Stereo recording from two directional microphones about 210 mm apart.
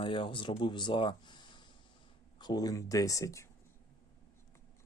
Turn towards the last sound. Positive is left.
turn(degrees=15)  # may be behind; listen again after turning